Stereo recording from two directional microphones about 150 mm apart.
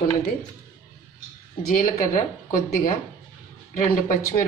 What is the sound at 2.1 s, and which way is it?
Speech, 65° left (ahead or behind).